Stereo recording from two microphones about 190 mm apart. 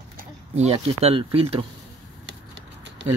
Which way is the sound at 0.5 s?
35° right (ahead or behind).